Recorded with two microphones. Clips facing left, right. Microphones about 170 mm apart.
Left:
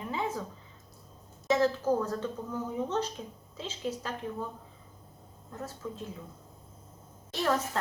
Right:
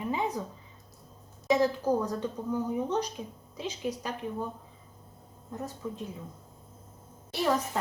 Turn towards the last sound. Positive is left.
turn(degrees=-10)  # may be behind; listen again after turning